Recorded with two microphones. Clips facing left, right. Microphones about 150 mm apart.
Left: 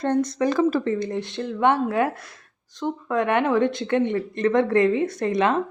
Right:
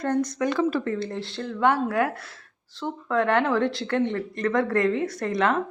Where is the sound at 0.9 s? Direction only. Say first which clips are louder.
Left 4 dB; 15° left (ahead or behind).